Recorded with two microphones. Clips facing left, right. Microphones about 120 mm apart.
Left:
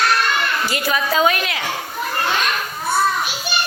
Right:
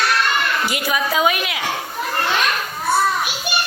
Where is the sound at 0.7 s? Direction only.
15° right (ahead or behind).